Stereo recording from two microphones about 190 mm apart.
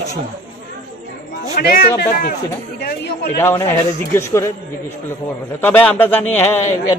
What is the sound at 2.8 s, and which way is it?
Speech, 60° left (ahead or behind).